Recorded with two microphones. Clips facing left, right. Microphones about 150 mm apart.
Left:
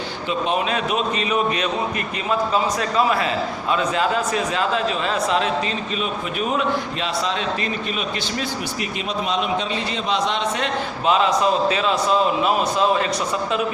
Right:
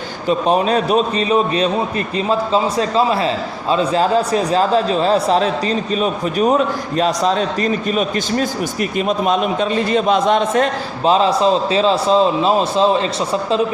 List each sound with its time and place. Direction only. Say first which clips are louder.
0.3 s a man's voice: right 7 dB; 40° right (ahead or behind)
11.0 s a man's voice: right 5 dB; 30° right (ahead or behind)